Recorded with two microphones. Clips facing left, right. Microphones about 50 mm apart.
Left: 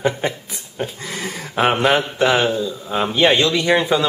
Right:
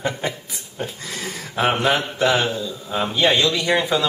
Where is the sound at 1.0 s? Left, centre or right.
Centre.